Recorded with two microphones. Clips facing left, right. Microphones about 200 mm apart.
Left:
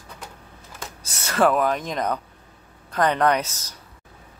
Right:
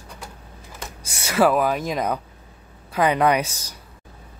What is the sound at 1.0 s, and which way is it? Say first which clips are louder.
Speech: right 1 dB; 15° right (ahead or behind).